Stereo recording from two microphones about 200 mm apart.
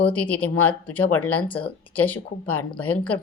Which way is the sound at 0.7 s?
10° left (ahead or behind).